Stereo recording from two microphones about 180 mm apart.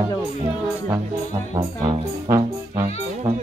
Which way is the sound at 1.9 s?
15° right (ahead or behind).